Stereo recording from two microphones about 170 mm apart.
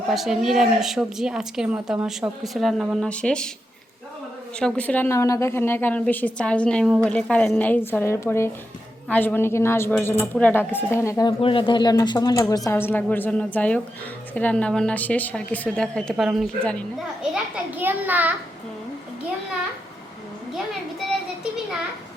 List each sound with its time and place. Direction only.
0.1 s a woman's voice: centre (ahead or behind)
4.6 s a woman's voice: 10° left (ahead or behind)
11.3 s a woman's voice: 30° left (ahead or behind); by 16.8 s centre (ahead or behind)
17.3 s a child's voice: 10° right (ahead or behind)